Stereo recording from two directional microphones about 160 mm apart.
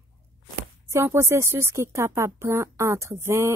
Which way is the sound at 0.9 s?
15° right (ahead or behind).